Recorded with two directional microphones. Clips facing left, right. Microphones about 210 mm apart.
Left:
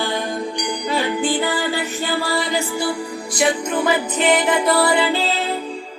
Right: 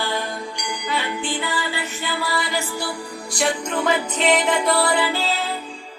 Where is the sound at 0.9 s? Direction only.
45° left (ahead or behind).